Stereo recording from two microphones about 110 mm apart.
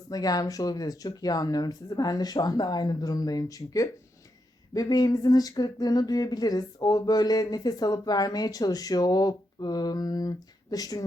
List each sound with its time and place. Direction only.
0.1 s speech: 35° left (ahead or behind)